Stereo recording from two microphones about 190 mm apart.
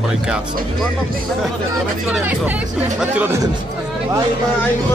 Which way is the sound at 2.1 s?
10° right (ahead or behind).